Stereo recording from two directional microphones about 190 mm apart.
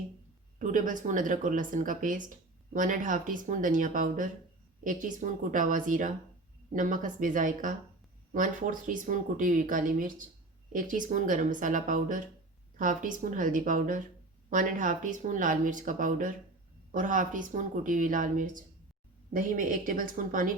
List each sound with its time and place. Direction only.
0.6 s speech: 45° right (ahead or behind)